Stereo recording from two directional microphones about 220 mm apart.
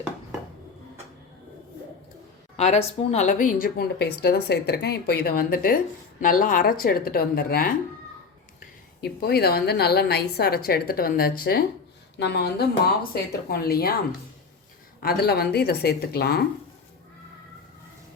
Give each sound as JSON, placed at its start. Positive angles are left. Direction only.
{"t": 2.6, "sound": "speech", "side_deg": 30}
{"t": 9.0, "sound": "a woman's voice", "side_deg": 45}
{"t": 15.0, "sound": "a woman's voice", "side_deg": 45}